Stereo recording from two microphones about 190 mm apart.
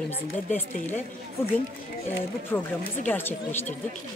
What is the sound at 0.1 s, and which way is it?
Speech, 10° left (ahead or behind).